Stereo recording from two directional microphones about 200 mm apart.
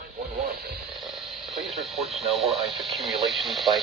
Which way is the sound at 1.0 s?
Centre (ahead or behind).